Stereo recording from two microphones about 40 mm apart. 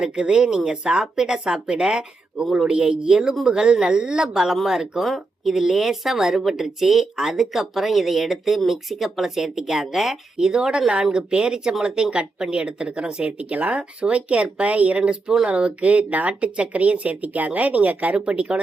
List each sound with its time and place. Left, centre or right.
0.0 s speech: right
4.2 s speech: centre
5.5 s speech: centre
10.3 s speech: centre